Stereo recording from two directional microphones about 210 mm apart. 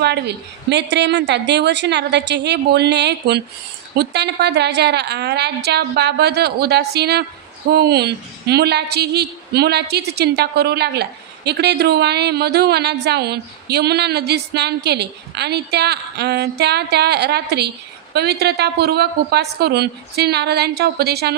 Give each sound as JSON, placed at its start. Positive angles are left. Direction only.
{"t": 0.0, "sound": "a woman's voice", "side_deg": -55}